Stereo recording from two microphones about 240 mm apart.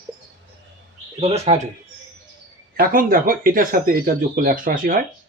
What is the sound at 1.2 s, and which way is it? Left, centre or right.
Speech, right.